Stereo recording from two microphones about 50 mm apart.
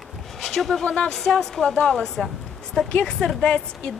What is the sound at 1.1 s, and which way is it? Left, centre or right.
Speech, centre.